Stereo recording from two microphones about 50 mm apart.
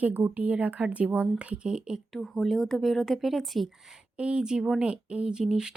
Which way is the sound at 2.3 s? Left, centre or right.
Centre.